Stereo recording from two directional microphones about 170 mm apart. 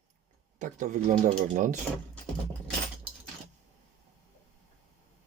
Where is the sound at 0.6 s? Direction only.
50° right (ahead or behind).